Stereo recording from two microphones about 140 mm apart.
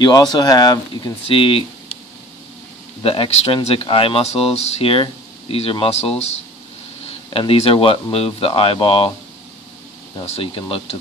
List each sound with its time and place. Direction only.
0.0 s speech: 30° left (ahead or behind)
1.2 s speech: 40° left (ahead or behind)
3.0 s speech: 40° left (ahead or behind)
10.2 s speech: 45° left (ahead or behind)